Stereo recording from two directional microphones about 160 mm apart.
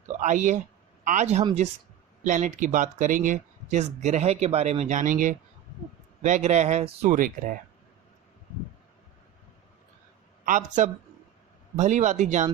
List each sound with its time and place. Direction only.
0.2 s speech: 50° right (ahead or behind)
7.2 s speech: 60° right (ahead or behind)
10.4 s speech: 55° right (ahead or behind)